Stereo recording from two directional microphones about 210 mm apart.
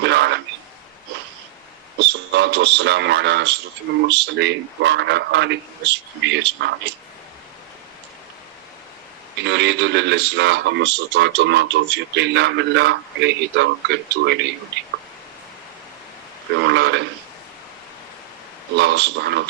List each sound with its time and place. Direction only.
0.0 s a sound: 55° right (ahead or behind)
2.0 s a man's voice: 55° right (ahead or behind)
9.4 s speech: 55° right (ahead or behind)
16.6 s speech: 55° right (ahead or behind)
18.8 s speech: 55° right (ahead or behind)